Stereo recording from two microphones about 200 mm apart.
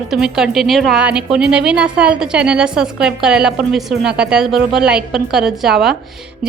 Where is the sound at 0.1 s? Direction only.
5° right (ahead or behind).